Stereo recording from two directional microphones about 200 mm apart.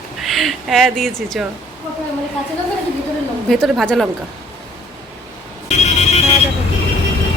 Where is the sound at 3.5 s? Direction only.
Centre (ahead or behind).